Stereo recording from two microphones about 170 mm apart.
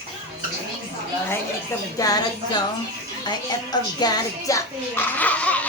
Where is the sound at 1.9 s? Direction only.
20° left (ahead or behind).